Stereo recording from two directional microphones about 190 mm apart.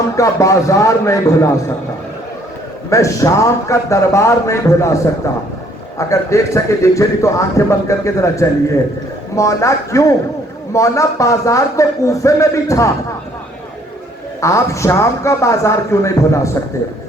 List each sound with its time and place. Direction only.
0.2 s a man's voice: 15° left (ahead or behind)
2.9 s a man's voice: 15° left (ahead or behind)
6.0 s a man's voice: 15° left (ahead or behind)
14.4 s a man's voice: 15° left (ahead or behind)